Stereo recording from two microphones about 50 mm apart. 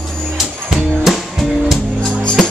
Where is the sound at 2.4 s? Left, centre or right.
Centre.